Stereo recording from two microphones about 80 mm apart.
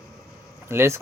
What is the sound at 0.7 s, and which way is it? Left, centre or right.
Speech, right.